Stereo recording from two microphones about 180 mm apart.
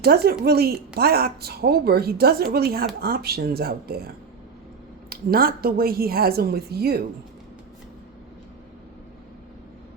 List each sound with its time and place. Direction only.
0.0 s speech: 60° right (ahead or behind)